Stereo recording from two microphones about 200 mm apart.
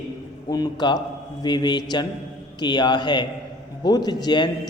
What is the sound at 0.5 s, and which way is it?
A woman's voice, 20° left (ahead or behind).